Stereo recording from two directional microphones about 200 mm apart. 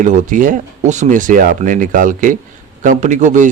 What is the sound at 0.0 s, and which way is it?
A man's voice, 40° right (ahead or behind).